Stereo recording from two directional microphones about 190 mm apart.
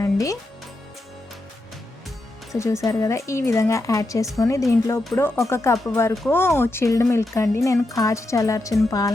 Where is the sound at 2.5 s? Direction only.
15° left (ahead or behind).